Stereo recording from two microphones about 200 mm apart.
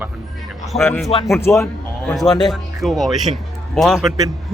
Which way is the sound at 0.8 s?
10° left (ahead or behind).